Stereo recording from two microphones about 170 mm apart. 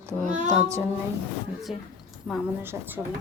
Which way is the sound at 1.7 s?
5° right (ahead or behind).